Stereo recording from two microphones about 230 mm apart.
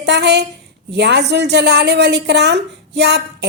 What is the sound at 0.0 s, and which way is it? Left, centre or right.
A woman's voice, right.